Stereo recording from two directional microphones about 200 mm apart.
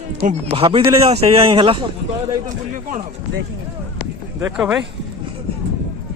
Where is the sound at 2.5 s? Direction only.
40° right (ahead or behind).